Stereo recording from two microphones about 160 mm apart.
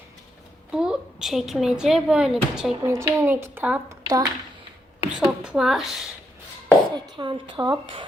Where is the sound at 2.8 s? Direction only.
15° right (ahead or behind).